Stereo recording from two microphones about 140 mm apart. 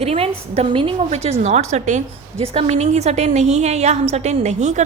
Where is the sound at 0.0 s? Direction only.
45° right (ahead or behind).